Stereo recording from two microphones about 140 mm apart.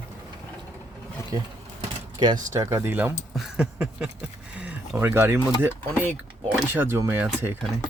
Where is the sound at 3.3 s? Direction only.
5° right (ahead or behind).